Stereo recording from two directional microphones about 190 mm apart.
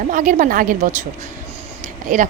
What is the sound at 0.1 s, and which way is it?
Speech, 45° right (ahead or behind).